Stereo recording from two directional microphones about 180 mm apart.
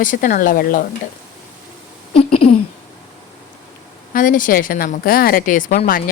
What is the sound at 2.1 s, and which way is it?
Speech, 30° left (ahead or behind).